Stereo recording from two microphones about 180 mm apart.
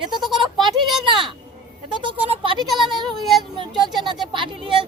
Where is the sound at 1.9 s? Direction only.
25° right (ahead or behind).